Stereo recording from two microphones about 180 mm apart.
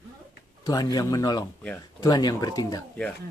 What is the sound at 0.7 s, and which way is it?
Speech, 20° left (ahead or behind).